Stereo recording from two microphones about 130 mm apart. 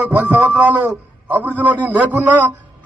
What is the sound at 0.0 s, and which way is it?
A man's voice, 10° right (ahead or behind).